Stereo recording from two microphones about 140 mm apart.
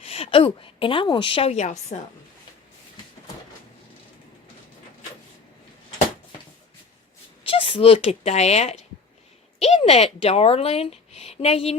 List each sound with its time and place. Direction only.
0.0 s a woman's voice: 45° left (ahead or behind)
7.4 s a sound: 40° left (ahead or behind)
7.9 s speech: 50° left (ahead or behind)